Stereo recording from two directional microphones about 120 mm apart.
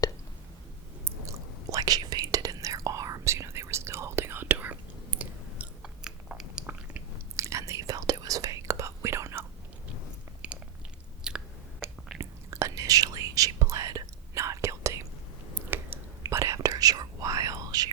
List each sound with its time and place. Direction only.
1.0 s whispering: 25° right (ahead or behind); by 7.0 s 10° right (ahead or behind)
7.3 s whispering: 25° right (ahead or behind)
10.4 s chewing: 10° right (ahead or behind)
11.8 s a sound: 20° right (ahead or behind)
12.2 s whispering: 25° right (ahead or behind)